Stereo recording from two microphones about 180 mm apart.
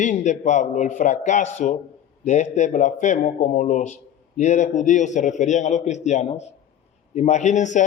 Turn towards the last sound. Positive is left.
turn(degrees=40)  # may be behind; listen again after turning